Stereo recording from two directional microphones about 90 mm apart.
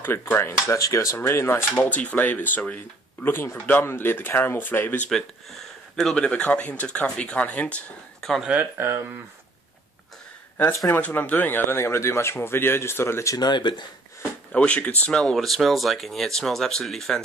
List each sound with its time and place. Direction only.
0.0 s speech: 25° left (ahead or behind)
1.8 s speech: 15° left (ahead or behind)
5.1 s speech: 5° left (ahead or behind)
8.5 s speech: 20° right (ahead or behind)
10.9 s speech: 20° left (ahead or behind)
13.4 s speech: 60° left (ahead or behind)
14.5 s speech: 15° left (ahead or behind)
15.1 s speech: 5° left (ahead or behind)